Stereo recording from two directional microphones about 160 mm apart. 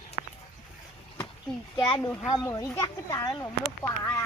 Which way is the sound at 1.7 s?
25° left (ahead or behind).